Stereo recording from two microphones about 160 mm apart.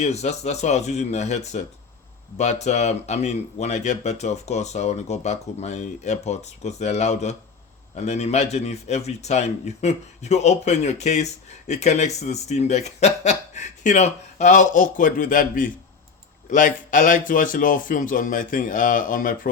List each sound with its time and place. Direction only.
0.0 s a man's voice: 45° left (ahead or behind)